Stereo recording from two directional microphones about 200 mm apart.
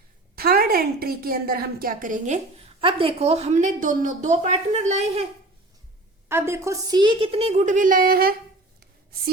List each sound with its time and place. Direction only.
0.3 s a woman's voice: 50° right (ahead or behind)
6.2 s a woman's voice: 10° right (ahead or behind); by 8.4 s 45° right (ahead or behind)